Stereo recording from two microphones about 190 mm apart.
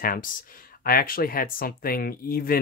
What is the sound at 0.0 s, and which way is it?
Speech, 50° left (ahead or behind).